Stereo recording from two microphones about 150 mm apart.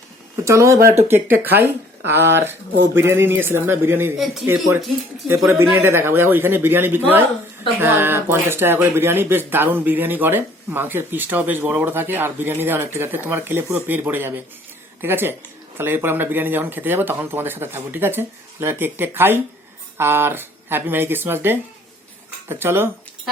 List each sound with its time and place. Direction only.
0.4 s speech: 20° right (ahead or behind)
5.2 s speech: centre (ahead or behind)
5.7 s speech: 15° right (ahead or behind)